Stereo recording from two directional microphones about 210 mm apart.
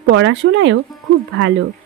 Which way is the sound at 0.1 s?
65° right (ahead or behind).